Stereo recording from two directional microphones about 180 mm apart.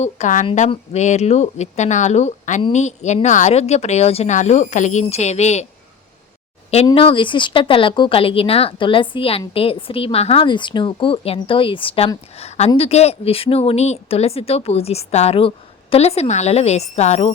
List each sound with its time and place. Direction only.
0.0 s a woman's voice: 45° left (ahead or behind)
6.8 s a woman's voice: 30° left (ahead or behind)